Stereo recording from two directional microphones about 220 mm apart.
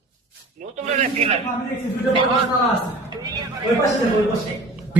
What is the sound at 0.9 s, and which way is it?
Speech, 30° right (ahead or behind).